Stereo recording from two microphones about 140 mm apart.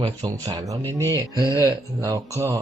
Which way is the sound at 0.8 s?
15° left (ahead or behind).